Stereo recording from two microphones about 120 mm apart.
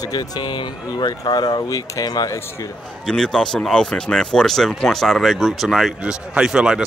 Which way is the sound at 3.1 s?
5° left (ahead or behind).